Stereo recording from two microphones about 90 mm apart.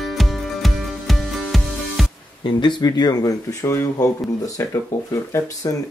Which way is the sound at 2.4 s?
60° left (ahead or behind).